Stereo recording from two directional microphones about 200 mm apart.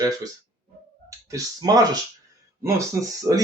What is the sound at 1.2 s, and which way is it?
Speech, 15° right (ahead or behind).